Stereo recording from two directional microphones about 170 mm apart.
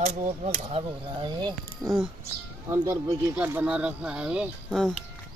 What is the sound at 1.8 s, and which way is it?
Speech, centre (ahead or behind).